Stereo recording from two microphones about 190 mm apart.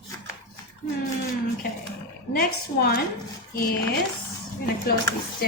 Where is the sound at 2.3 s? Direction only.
55° left (ahead or behind).